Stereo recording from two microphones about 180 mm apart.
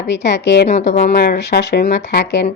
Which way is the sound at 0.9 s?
40° left (ahead or behind).